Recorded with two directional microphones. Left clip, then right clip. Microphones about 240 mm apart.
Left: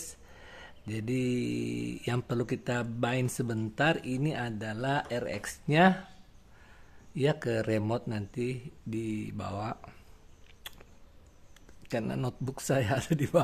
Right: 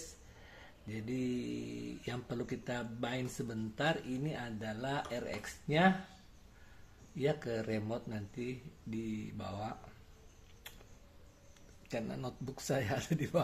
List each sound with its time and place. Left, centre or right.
0.4 s mantra: left
7.2 s mantra: left
11.9 s speech: left